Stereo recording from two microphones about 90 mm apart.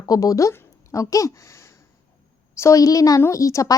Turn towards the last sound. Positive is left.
turn(degrees=35)  # may be behind; listen again after turning